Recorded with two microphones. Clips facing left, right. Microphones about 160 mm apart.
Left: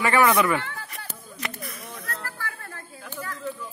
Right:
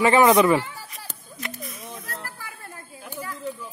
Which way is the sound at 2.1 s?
15° right (ahead or behind).